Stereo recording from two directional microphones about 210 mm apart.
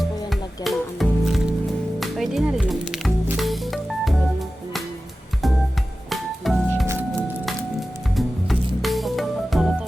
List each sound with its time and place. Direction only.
0.0 s music: centre (ahead or behind)
6.1 s music: centre (ahead or behind)
8.1 s music: centre (ahead or behind)